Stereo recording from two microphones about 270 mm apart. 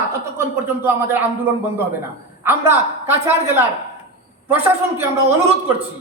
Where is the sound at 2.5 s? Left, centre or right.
Centre.